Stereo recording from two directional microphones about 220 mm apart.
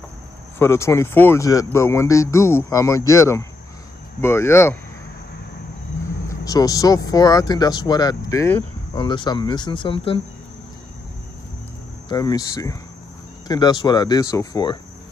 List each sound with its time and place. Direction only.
0.6 s speech: 10° left (ahead or behind)
6.2 s speech: 15° left (ahead or behind)
12.1 s speech: 15° left (ahead or behind)